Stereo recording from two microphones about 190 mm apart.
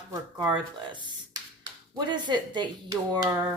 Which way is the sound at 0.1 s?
20° right (ahead or behind).